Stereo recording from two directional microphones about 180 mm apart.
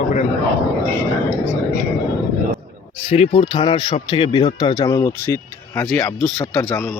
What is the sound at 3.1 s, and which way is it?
Speech, 35° left (ahead or behind).